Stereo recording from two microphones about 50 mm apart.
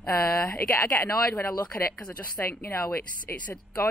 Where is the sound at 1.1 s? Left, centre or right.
Left.